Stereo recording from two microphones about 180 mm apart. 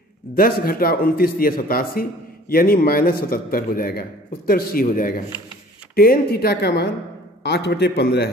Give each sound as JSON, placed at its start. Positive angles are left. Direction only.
{"t": 0.3, "sound": "speech", "side_deg": 55}